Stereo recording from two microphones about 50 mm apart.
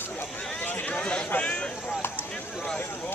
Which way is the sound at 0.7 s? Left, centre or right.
Left.